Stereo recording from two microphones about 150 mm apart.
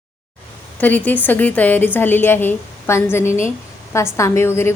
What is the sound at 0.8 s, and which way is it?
A woman's voice, 10° left (ahead or behind).